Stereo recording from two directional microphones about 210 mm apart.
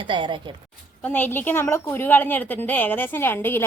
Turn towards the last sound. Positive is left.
turn(degrees=10)  # may be behind; listen again after turning